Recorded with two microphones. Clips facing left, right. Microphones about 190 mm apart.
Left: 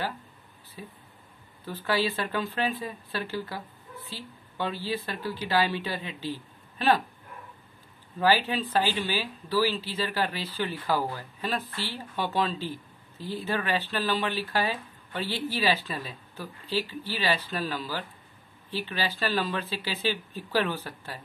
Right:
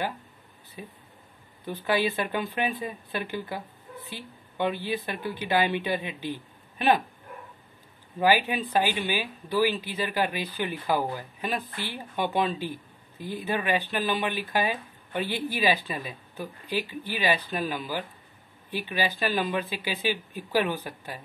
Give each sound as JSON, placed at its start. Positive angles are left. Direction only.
{"t": 0.8, "sound": "speech", "side_deg": -15}
{"t": 8.2, "sound": "speech", "side_deg": -15}